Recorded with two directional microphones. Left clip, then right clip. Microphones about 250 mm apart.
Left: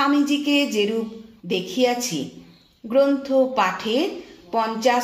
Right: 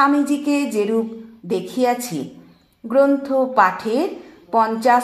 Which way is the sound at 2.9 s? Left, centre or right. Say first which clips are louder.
Right 2 dB; right.